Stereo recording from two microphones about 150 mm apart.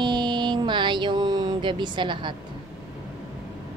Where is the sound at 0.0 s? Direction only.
30° right (ahead or behind).